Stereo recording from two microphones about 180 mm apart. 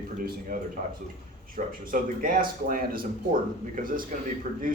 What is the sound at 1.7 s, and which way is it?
Speech, 50° right (ahead or behind).